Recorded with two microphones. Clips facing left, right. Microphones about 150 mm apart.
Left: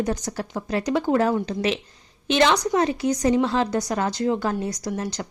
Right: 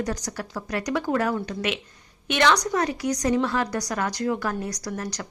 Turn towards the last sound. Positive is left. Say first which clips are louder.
# left 3 dB
turn(degrees=25)  # may be behind; listen again after turning